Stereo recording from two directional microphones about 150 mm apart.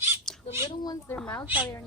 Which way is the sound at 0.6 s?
25° left (ahead or behind).